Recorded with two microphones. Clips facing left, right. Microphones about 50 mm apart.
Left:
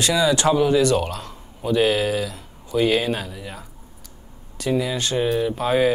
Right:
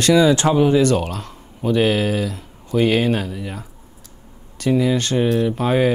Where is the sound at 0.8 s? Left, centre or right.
Right.